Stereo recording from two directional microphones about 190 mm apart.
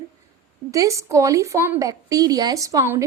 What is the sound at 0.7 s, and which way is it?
A woman's voice, 15° right (ahead or behind).